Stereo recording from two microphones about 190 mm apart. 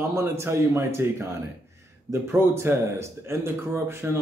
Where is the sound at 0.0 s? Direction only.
15° right (ahead or behind).